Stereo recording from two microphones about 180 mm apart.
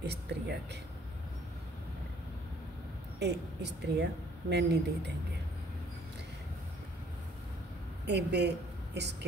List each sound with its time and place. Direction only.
0.0 s a sound: 65° right (ahead or behind)
3.2 s speech: 65° right (ahead or behind)
8.0 s a woman's voice: 70° right (ahead or behind)